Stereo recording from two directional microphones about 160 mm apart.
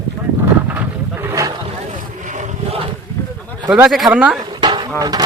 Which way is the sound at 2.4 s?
35° right (ahead or behind).